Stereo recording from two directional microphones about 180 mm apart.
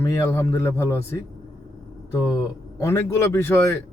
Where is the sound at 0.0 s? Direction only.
15° left (ahead or behind).